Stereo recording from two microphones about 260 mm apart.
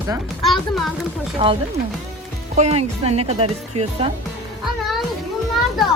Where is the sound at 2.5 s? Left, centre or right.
Right.